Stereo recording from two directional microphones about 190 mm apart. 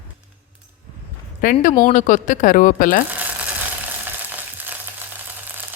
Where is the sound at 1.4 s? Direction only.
50° left (ahead or behind).